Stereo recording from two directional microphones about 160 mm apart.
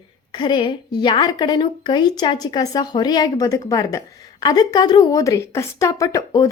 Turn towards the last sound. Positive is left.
turn(degrees=20)  # may be behind; listen again after turning